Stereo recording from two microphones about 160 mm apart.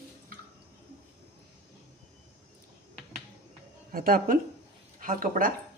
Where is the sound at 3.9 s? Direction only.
65° right (ahead or behind).